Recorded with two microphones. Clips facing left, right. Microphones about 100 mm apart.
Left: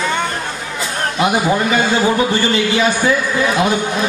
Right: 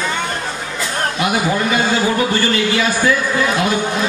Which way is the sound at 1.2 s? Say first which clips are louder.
Left 4 dB; 25° left (ahead or behind).